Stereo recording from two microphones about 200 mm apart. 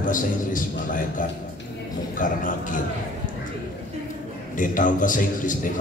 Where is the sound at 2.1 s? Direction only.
40° left (ahead or behind).